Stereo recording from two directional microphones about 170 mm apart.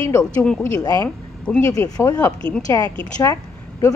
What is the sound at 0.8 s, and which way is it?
Speech, 20° left (ahead or behind).